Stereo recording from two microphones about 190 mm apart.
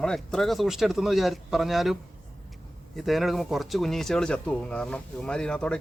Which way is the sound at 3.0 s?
Centre (ahead or behind).